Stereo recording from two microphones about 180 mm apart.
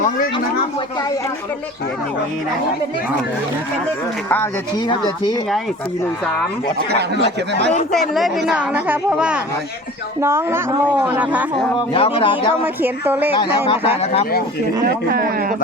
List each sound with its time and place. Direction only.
4.9 s speech: 25° left (ahead or behind)
7.9 s a woman's voice: centre (ahead or behind)
11.9 s speech: 30° left (ahead or behind)
12.6 s a woman's voice: 10° right (ahead or behind)
13.7 s speech: 35° left (ahead or behind)
15.1 s a man's voice: 55° right (ahead or behind)